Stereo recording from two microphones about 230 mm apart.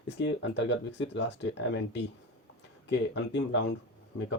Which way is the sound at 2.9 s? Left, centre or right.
Left.